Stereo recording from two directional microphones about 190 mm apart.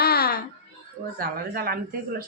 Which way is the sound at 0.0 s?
55° left (ahead or behind).